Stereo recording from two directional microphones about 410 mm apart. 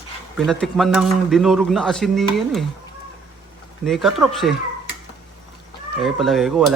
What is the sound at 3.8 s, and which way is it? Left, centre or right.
Speech, centre.